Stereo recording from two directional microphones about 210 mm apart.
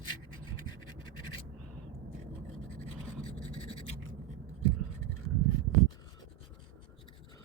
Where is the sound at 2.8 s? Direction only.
30° left (ahead or behind).